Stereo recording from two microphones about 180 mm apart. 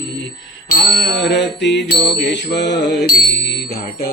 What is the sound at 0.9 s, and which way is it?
Music, 70° left (ahead or behind).